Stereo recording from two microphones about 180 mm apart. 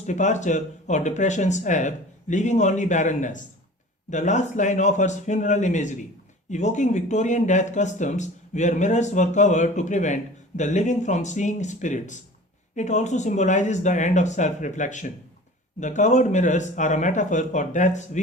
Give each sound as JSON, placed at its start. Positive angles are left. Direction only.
{"t": 0.0, "sound": "speech", "side_deg": 40}